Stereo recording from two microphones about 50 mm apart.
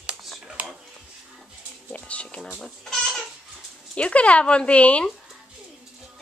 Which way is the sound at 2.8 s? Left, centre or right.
Centre.